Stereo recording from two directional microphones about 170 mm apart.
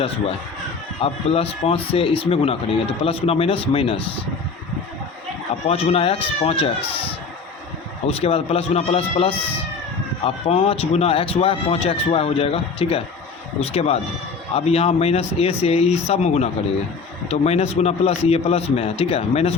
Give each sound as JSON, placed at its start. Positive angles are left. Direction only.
{"t": 1.0, "sound": "speech", "side_deg": 35}
{"t": 5.6, "sound": "speech", "side_deg": 35}
{"t": 8.0, "sound": "speech", "side_deg": 35}